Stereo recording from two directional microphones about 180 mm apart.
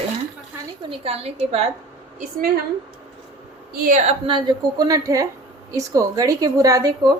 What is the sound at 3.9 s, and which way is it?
A woman's voice, 35° right (ahead or behind).